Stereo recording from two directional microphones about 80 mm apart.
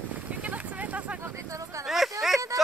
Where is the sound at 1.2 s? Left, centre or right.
Right.